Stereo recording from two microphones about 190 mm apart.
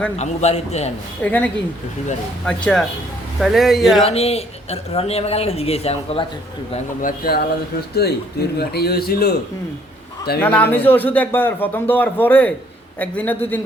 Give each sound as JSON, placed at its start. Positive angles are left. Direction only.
{"t": 0.2, "sound": "speech", "side_deg": 35}
{"t": 1.2, "sound": "a man's voice", "side_deg": 10}
{"t": 4.0, "sound": "speech", "side_deg": 30}
{"t": 7.0, "sound": "speech", "side_deg": 55}
{"t": 10.4, "sound": "speech", "side_deg": 10}